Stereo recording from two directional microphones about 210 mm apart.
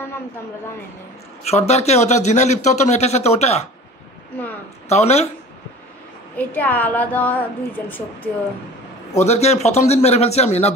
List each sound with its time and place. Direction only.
1.4 s speech: 30° left (ahead or behind)
4.8 s speech: 30° left (ahead or behind)
6.3 s a woman's voice: 5° left (ahead or behind)
9.3 s speech: 30° left (ahead or behind)